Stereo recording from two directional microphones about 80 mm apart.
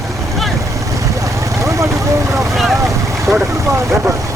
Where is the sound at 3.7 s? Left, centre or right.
Right.